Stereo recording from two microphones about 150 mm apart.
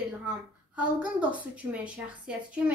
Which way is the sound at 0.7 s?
10° right (ahead or behind).